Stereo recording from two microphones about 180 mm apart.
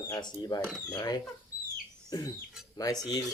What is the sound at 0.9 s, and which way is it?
Cutlery, 20° left (ahead or behind).